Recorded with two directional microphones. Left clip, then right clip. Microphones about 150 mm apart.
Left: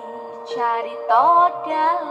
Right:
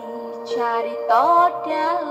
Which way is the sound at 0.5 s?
35° right (ahead or behind).